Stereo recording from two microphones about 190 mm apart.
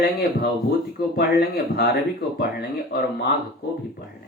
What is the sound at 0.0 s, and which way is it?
Speech, 55° left (ahead or behind).